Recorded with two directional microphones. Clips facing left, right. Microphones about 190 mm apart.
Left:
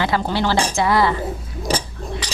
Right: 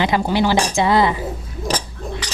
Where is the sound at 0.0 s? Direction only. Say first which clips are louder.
Right 3 dB; 15° right (ahead or behind).